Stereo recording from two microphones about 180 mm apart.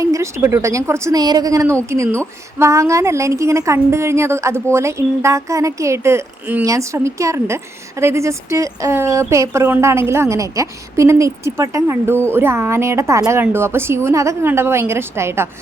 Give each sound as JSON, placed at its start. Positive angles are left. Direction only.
{"t": 0.0, "sound": "speech", "side_deg": -15}